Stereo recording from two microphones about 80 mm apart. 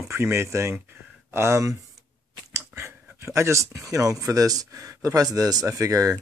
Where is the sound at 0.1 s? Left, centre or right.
Right.